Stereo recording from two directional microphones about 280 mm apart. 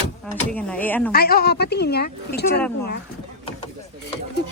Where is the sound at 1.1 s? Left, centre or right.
Left.